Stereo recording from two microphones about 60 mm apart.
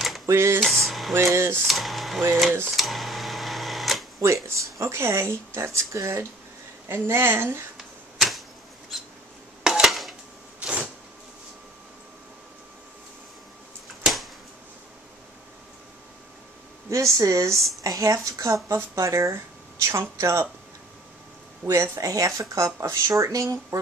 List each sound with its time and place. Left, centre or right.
0.3 s speech: right
0.6 s speech: centre
1.1 s speech: right
1.7 s speech: centre
2.7 s camera: centre
4.4 s speech: right
6.9 s speech: right
7.7 s typewriter: centre
9.6 s dishes: centre
10.6 s a sound: centre
13.8 s a sound: centre
16.9 s speech: right
21.6 s speech: right
22.1 s speech: right